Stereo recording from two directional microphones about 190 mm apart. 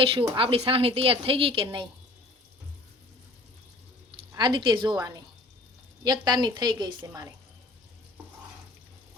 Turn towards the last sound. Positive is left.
turn(degrees=-15)  # may be behind; listen again after turning